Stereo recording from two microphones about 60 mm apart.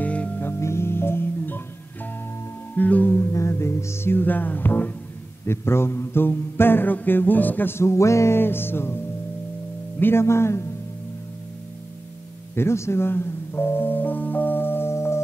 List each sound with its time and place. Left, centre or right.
0.0 s music: left
0.4 s music: left
2.7 s music: left
3.2 s music: left
5.5 s mantra: left
8.4 s mantra: left
9.9 s speech: left
12.5 s speech: left